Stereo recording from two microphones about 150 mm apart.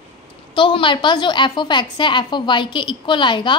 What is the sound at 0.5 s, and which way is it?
A woman's voice, 35° left (ahead or behind).